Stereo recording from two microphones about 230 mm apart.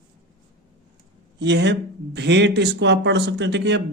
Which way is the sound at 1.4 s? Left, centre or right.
Right.